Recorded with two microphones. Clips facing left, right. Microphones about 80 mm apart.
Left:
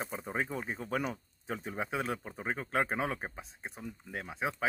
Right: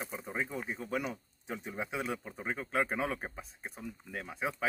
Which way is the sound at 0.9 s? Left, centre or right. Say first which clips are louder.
Left 3 dB; left.